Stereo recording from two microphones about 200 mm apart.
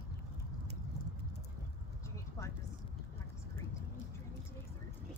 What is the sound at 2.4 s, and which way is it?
Vehicle, 15° left (ahead or behind).